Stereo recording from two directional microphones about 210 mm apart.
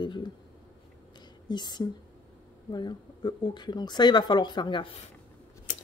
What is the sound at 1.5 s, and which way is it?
Speech, 20° left (ahead or behind).